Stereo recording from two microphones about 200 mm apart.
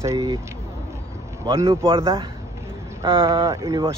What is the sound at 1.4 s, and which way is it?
Speech, 15° right (ahead or behind).